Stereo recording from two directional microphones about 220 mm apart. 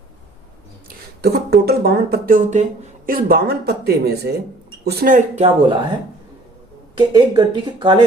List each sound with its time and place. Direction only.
0.9 s speech: 45° right (ahead or behind)
6.9 s speech: 20° right (ahead or behind)